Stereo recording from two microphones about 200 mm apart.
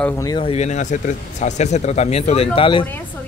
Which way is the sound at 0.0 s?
15° left (ahead or behind).